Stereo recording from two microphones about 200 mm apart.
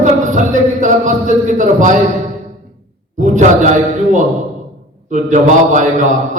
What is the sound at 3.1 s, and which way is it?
A man's voice, 40° right (ahead or behind).